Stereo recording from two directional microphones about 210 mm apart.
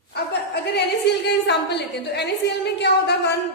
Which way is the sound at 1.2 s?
50° left (ahead or behind).